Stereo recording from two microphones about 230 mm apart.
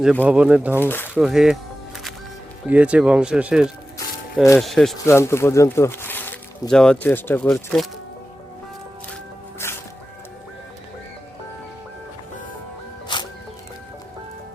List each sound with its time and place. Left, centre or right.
0.0 s speech: centre
0.9 s speech: centre
1.1 s speech: centre
2.6 s speech: centre
5.0 s speech: centre
9.6 s music: centre
13.1 s music: left